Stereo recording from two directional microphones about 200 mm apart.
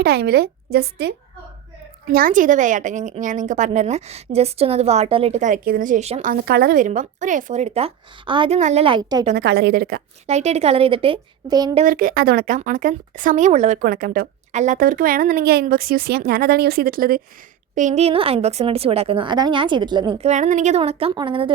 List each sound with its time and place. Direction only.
0.0 s speech: 55° right (ahead or behind)
2.1 s a woman's voice: 45° right (ahead or behind)
6.3 s a woman's voice: 50° right (ahead or behind); by 9.2 s 20° right (ahead or behind)
9.3 s speech: 55° right (ahead or behind)
10.2 s a woman's voice: 35° right (ahead or behind)
11.9 s speech: 45° right (ahead or behind)
17.7 s a woman's voice: 35° right (ahead or behind)